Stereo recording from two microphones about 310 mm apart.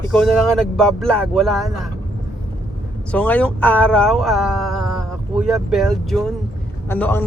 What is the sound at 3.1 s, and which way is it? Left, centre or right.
A man's voice, centre.